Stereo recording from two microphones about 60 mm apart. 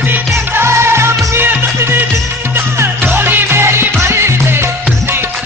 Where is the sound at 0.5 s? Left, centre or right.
Right.